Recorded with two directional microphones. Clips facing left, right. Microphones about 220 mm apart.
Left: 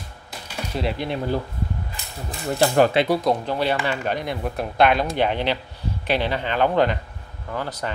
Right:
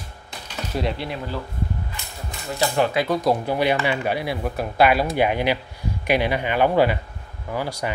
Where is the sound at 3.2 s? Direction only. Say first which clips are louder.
Right 1 dB; 5° right (ahead or behind).